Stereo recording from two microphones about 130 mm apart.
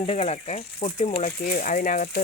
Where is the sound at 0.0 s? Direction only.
45° left (ahead or behind).